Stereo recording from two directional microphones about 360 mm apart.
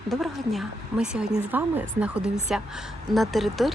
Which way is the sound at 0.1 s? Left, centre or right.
Centre.